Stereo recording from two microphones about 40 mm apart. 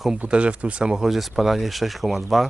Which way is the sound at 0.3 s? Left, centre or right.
Right.